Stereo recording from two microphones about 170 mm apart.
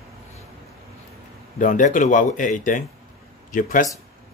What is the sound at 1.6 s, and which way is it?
Speech, 50° left (ahead or behind).